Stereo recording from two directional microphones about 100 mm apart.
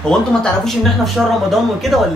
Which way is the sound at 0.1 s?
5° left (ahead or behind).